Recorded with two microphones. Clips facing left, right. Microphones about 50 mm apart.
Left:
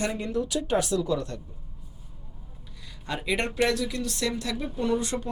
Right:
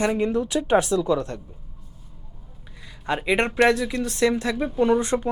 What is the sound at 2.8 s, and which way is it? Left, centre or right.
Speech, right.